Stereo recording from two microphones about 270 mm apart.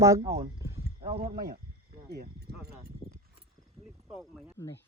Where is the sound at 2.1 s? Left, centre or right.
Right.